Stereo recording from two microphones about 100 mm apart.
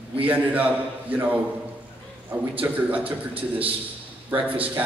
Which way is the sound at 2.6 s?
15° right (ahead or behind).